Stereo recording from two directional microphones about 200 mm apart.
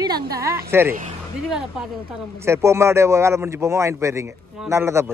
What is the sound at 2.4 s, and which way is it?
Speech, 15° right (ahead or behind).